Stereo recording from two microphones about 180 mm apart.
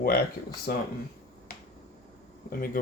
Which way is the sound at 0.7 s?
60° left (ahead or behind).